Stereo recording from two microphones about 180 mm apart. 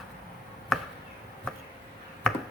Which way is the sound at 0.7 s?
Centre (ahead or behind).